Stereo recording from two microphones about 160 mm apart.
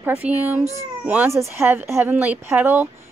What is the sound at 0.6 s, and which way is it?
Speech, 45° right (ahead or behind).